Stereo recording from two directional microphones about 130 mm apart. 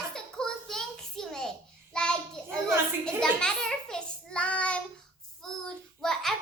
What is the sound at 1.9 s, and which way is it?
A child's voice, 5° left (ahead or behind).